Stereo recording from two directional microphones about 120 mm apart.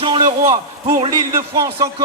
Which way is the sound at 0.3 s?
45° right (ahead or behind).